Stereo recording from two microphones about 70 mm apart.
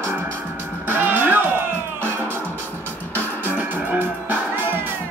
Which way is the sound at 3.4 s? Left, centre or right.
Right.